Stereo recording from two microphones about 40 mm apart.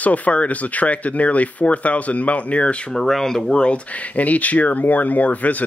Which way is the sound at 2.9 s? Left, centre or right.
Centre.